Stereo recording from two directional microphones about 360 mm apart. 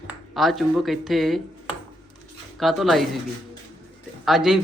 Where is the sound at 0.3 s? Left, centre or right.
Centre.